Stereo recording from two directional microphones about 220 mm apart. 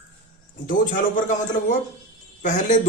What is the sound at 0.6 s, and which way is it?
Speech, 35° left (ahead or behind).